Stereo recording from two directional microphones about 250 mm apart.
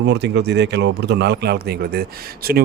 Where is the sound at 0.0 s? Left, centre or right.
Right.